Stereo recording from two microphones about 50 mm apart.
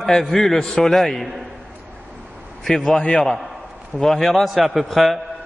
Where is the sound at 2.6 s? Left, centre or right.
Centre.